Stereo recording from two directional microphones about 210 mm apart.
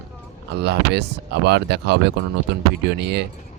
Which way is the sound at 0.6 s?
50° right (ahead or behind).